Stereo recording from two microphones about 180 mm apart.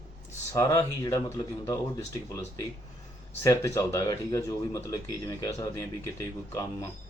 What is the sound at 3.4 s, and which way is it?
Speech, 15° left (ahead or behind).